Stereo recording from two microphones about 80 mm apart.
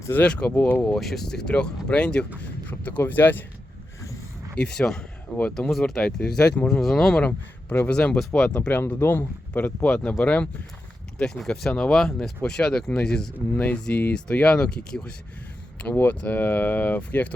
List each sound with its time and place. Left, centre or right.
0.1 s speech: centre
0.9 s speech: centre; by 3.4 s left
4.5 s speech: centre
7.3 s speech: left
11.2 s speech: centre